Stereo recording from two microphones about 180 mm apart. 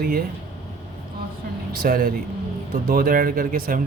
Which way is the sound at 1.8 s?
55° right (ahead or behind).